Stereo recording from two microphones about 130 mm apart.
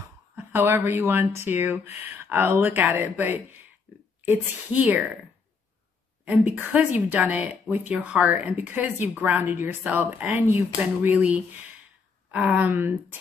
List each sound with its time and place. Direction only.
0.0 s speech: 15° right (ahead or behind)
3.9 s a sound: 15° right (ahead or behind)
4.3 s speech: 15° right (ahead or behind)
6.2 s speech: 10° right (ahead or behind)